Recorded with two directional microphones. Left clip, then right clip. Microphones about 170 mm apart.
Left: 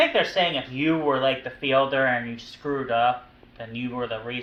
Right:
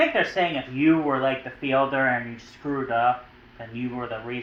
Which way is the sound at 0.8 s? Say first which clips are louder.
Right 5 dB; 20° left (ahead or behind).